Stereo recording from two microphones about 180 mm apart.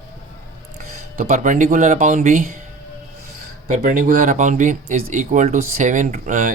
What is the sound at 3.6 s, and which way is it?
Speech, 45° right (ahead or behind).